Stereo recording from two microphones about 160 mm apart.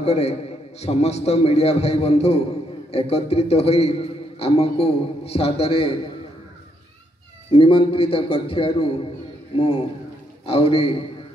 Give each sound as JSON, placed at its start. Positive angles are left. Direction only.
{"t": 0.0, "sound": "a man's voice", "side_deg": 40}
{"t": 7.5, "sound": "a man's voice", "side_deg": 35}